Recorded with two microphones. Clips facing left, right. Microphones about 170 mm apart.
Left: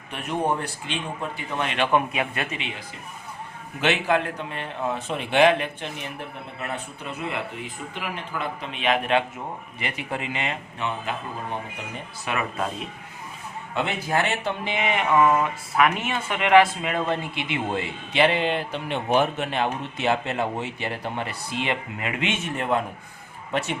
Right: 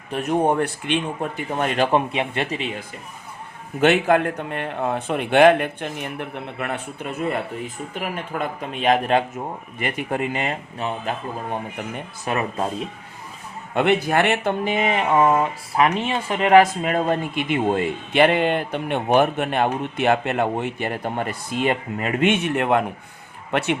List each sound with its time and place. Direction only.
0.1 s speech: 40° right (ahead or behind)
3.8 s speech: 50° right (ahead or behind)
12.2 s speech: 35° right (ahead or behind)
13.7 s speech: 65° right (ahead or behind)
14.6 s speech: 40° right (ahead or behind)
22.3 s a man's voice: 65° right (ahead or behind)